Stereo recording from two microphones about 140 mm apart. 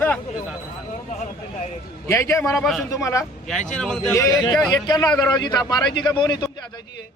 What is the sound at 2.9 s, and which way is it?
Speech, 20° left (ahead or behind).